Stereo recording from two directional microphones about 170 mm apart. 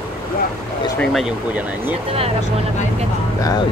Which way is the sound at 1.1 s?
10° right (ahead or behind).